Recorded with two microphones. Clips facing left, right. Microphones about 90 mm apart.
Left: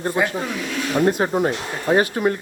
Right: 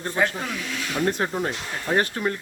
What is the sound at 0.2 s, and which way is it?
Speech, 10° left (ahead or behind).